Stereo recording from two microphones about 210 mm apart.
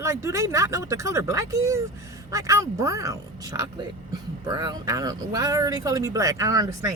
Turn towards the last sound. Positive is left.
turn(degrees=-15)  # may be behind; listen again after turning